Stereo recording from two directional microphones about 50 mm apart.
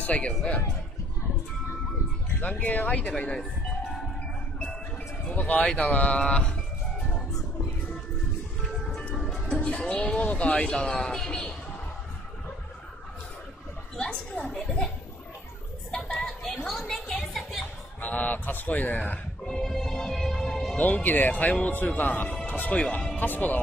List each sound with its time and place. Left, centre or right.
0.0 s speech: left
2.4 s speech: left
5.3 s speech: left
9.6 s speech: left
10.7 s speech: centre
13.9 s speech: centre
16.6 s a sound: centre
18.0 s speech: left
19.4 s music: centre
20.6 s speech: left